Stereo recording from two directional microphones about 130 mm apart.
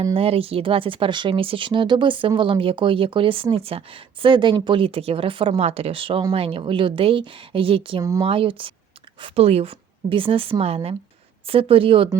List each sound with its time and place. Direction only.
0.1 s a woman's voice: 45° right (ahead or behind)